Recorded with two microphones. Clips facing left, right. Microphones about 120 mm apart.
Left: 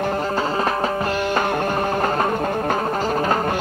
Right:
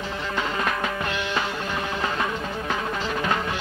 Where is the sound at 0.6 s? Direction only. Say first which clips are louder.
Left 5 dB; 35° left (ahead or behind).